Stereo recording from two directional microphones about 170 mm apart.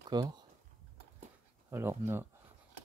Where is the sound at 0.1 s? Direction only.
25° right (ahead or behind).